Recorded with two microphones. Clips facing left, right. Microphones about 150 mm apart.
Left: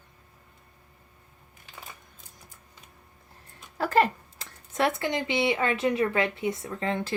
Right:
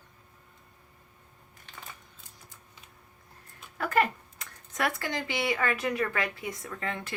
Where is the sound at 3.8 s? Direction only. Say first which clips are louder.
Left 4 dB; 30° left (ahead or behind).